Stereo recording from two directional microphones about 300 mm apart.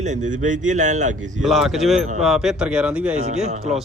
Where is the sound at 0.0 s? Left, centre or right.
Right.